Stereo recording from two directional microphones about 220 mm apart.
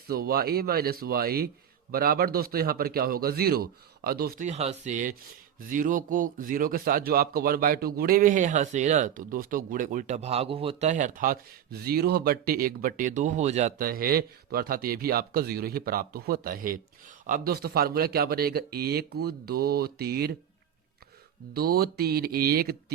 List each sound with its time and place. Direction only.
0.1 s speech: 45° right (ahead or behind)
21.5 s speech: 45° right (ahead or behind)